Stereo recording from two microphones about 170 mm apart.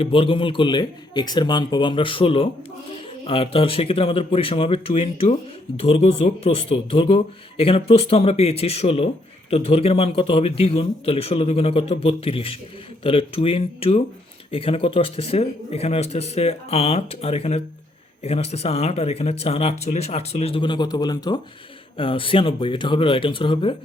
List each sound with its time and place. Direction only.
0.0 s speech: 30° left (ahead or behind)